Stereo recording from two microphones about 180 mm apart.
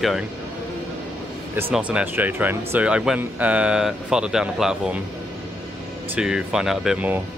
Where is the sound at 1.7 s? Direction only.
10° right (ahead or behind).